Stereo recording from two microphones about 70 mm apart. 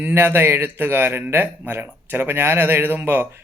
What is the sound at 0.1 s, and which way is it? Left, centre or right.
A man's voice, right.